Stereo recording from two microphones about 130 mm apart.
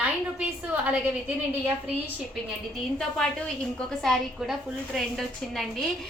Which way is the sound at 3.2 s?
5° left (ahead or behind).